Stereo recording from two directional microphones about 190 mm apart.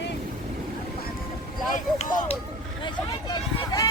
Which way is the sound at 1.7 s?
40° left (ahead or behind).